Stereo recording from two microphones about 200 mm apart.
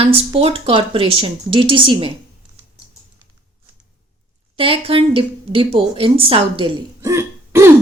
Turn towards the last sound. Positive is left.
turn(degrees=-15)  # may be behind; listen again after turning